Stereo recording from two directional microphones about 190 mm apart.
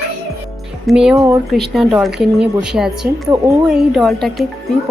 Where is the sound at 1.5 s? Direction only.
Centre (ahead or behind).